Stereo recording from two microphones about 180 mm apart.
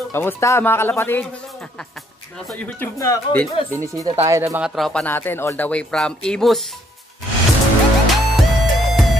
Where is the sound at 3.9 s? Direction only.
20° right (ahead or behind).